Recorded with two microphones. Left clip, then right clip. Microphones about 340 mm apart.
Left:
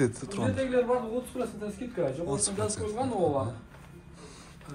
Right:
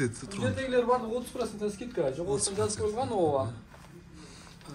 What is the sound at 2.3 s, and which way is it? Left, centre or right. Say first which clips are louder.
Speech: right 1 dB; centre.